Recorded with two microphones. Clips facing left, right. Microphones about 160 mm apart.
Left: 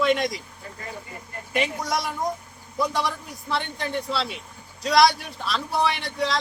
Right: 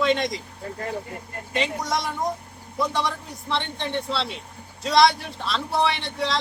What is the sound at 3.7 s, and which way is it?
Speech, 25° right (ahead or behind).